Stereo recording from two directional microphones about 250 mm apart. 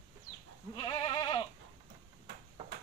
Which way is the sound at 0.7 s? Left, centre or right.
Centre.